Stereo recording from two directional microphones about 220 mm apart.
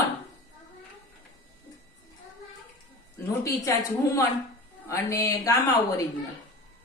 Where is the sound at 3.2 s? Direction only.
15° left (ahead or behind).